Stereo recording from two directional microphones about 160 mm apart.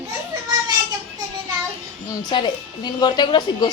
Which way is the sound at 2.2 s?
25° left (ahead or behind).